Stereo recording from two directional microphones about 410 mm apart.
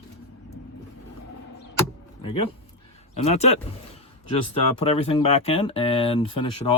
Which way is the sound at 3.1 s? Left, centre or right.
Centre.